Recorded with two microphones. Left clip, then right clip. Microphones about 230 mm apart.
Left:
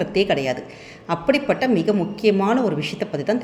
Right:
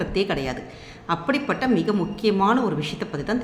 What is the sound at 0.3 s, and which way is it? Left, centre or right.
Speech, centre.